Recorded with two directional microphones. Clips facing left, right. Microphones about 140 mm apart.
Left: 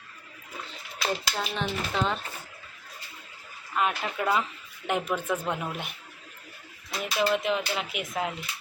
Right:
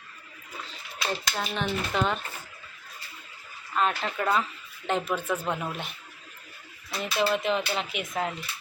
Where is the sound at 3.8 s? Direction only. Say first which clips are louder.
Right 1 dB; 10° left (ahead or behind).